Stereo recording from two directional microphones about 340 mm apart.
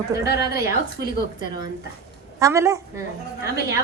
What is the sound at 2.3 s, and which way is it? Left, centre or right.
Speech, centre.